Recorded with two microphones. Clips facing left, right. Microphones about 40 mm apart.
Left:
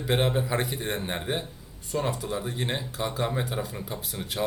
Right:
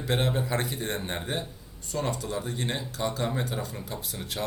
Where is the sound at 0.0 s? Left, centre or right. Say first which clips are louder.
Left 2 dB; centre.